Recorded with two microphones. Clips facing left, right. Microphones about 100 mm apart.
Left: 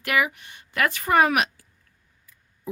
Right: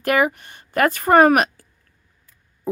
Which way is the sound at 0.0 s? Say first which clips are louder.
Right 6 dB; 40° right (ahead or behind).